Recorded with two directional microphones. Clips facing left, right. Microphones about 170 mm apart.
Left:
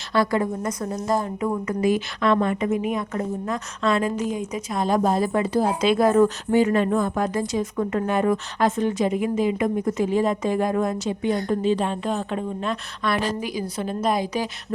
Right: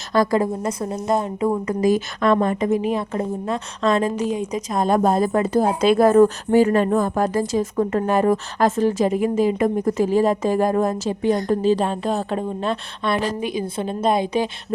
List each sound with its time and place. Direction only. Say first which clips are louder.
0.1 s a woman's voice: right 3 dB; 40° right (ahead or behind)